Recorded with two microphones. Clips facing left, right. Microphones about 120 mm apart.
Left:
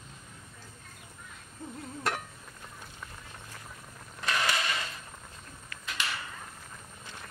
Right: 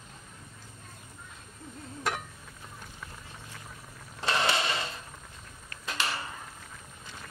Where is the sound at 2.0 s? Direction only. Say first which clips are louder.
Even; centre (ahead or behind).